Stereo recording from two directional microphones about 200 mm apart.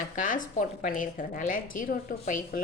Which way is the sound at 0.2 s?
40° left (ahead or behind).